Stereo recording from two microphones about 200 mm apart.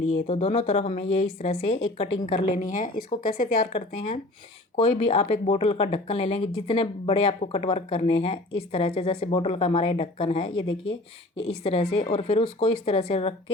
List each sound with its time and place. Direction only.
0.3 s speech: 30° left (ahead or behind)
3.6 s speech: 25° left (ahead or behind)